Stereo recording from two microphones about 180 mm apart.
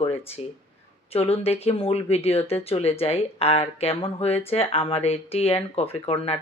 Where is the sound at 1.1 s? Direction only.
35° left (ahead or behind).